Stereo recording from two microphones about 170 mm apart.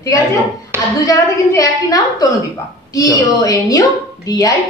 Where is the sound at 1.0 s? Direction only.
20° left (ahead or behind).